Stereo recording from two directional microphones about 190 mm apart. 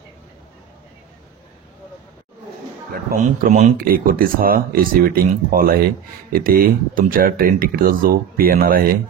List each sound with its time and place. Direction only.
2.9 s speech: 50° right (ahead or behind)